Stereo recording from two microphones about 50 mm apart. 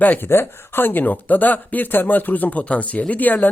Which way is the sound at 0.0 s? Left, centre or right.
Left.